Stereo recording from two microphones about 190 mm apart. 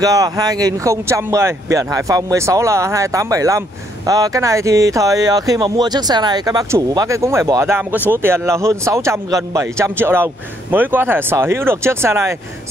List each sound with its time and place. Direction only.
0.0 s speech: 20° right (ahead or behind)